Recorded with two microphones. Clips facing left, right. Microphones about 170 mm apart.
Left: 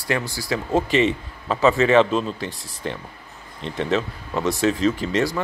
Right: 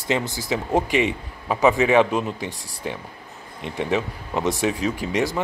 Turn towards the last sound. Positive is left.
turn(degrees=-15)  # may be behind; listen again after turning